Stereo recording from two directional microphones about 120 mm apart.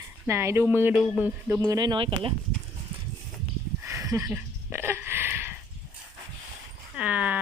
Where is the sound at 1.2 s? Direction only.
20° right (ahead or behind).